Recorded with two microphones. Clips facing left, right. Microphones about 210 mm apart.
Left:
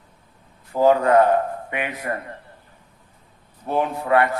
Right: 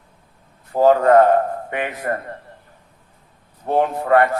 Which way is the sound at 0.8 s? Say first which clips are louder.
Right 3 dB; 50° right (ahead or behind).